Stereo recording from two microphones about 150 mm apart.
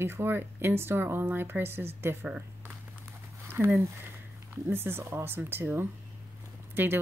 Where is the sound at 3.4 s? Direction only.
15° right (ahead or behind).